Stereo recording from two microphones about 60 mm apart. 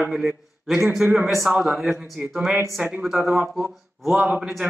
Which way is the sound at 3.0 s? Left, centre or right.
Centre.